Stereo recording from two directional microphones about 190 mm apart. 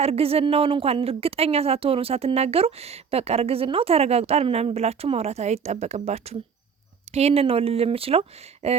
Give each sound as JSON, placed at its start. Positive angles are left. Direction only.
{"t": 0.0, "sound": "a woman's voice", "side_deg": -30}